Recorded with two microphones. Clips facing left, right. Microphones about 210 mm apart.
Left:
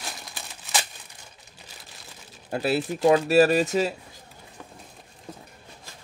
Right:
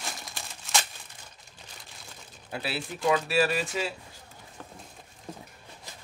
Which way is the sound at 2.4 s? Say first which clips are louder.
Left 9 dB; 45° left (ahead or behind).